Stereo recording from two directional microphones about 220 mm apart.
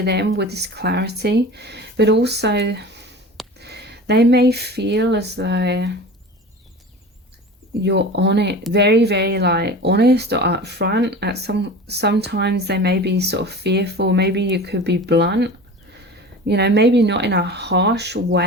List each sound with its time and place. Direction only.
0.0 s speech: 50° right (ahead or behind)
7.9 s speech: 50° right (ahead or behind)